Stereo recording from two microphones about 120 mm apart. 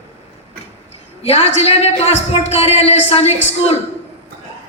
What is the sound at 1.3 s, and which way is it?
Speech, 60° left (ahead or behind).